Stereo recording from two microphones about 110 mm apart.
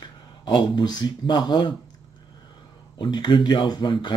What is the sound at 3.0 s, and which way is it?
Speech, 40° left (ahead or behind).